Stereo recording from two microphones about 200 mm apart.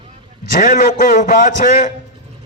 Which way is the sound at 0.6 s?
40° left (ahead or behind).